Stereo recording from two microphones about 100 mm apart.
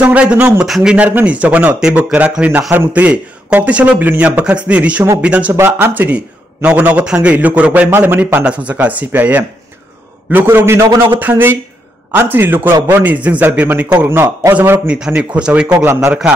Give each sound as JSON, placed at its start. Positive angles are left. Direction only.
{"t": 0.0, "sound": "a man's voice", "side_deg": -10}
{"t": 0.7, "sound": "a man's voice", "side_deg": 0}
{"t": 0.9, "sound": "a man's voice", "side_deg": -15}
{"t": 14.9, "sound": "a man's voice", "side_deg": -10}